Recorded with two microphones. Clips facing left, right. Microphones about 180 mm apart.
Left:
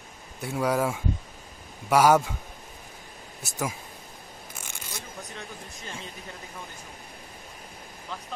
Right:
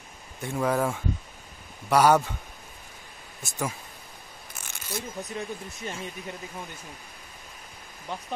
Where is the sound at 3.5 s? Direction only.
5° left (ahead or behind).